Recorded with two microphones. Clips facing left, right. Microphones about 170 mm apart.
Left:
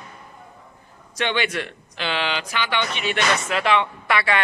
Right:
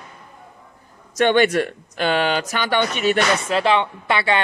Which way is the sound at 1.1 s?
45° right (ahead or behind).